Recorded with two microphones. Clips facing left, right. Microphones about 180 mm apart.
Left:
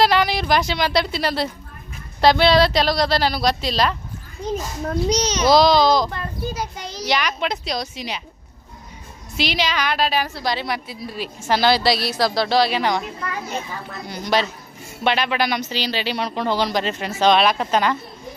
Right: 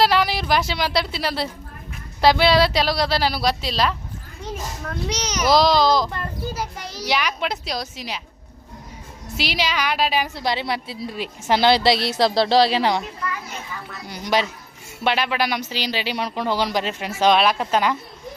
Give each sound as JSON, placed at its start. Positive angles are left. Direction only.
{"t": 0.0, "sound": "speech", "side_deg": -5}
{"t": 4.8, "sound": "a child's voice", "side_deg": 35}
{"t": 5.5, "sound": "speech", "side_deg": 0}
{"t": 6.7, "sound": "a child's voice", "side_deg": 20}
{"t": 7.0, "sound": "speech", "side_deg": -5}
{"t": 9.4, "sound": "a woman's voice", "side_deg": -10}
{"t": 14.1, "sound": "speech", "side_deg": -10}